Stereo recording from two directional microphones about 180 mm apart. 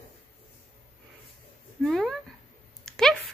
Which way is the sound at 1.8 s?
Centre (ahead or behind).